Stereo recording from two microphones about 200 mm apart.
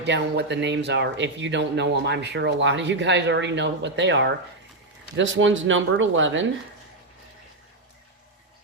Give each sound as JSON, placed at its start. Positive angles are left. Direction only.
{"t": 0.0, "sound": "speech", "side_deg": -60}